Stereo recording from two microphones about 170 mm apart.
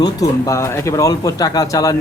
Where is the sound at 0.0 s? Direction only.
20° left (ahead or behind).